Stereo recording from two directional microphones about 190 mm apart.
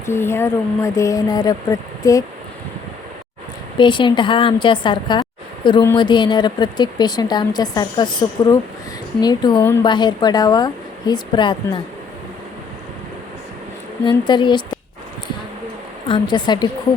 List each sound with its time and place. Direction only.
0.0 s speech: 15° left (ahead or behind)
3.8 s speech: 25° left (ahead or behind)
14.0 s speech: 25° left (ahead or behind)
16.0 s speech: 25° left (ahead or behind)